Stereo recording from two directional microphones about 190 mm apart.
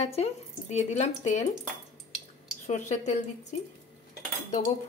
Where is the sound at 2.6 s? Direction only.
40° left (ahead or behind).